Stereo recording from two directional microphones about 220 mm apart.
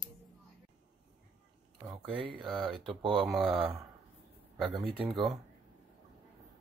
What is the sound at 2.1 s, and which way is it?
Speech, 25° right (ahead or behind).